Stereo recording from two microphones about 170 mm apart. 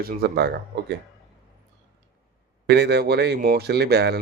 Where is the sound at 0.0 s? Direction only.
65° right (ahead or behind).